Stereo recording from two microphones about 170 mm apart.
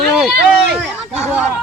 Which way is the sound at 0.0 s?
Centre (ahead or behind).